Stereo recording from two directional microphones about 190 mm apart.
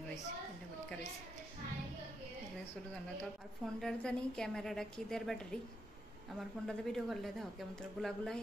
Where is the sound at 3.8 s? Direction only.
5° left (ahead or behind).